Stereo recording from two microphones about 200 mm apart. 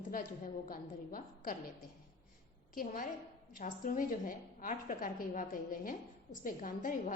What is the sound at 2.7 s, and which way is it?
A woman's voice, 40° left (ahead or behind).